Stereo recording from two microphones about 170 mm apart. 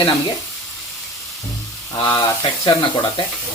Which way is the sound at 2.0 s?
25° left (ahead or behind).